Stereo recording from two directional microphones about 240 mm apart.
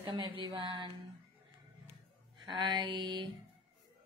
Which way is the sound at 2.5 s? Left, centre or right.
Centre.